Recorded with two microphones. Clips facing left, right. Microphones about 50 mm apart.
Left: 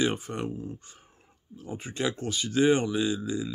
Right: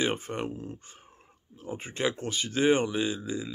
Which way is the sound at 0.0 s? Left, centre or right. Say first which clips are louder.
Left 1 dB; right.